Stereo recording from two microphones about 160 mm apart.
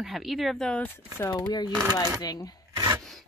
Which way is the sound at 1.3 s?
25° left (ahead or behind).